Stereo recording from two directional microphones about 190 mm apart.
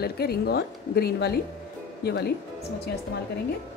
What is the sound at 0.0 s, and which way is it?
A woman's voice, 55° left (ahead or behind).